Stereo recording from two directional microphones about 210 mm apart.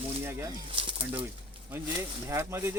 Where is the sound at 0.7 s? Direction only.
25° right (ahead or behind).